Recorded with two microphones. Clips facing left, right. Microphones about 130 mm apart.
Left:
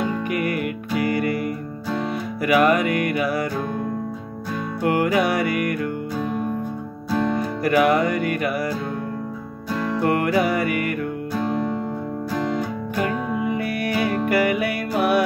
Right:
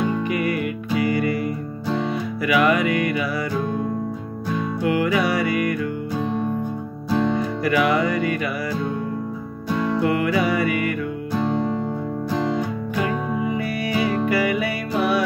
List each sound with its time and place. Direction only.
0.3 s music: 50° left (ahead or behind)
2.4 s music: 45° left (ahead or behind)
4.8 s music: 50° left (ahead or behind)
7.6 s music: 45° left (ahead or behind)
10.0 s music: 50° left (ahead or behind)
13.5 s music: 55° left (ahead or behind)